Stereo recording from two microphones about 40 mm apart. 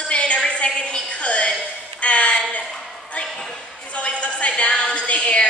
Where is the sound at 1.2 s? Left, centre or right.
Left.